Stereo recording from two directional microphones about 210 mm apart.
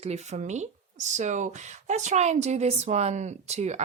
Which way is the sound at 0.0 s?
30° right (ahead or behind).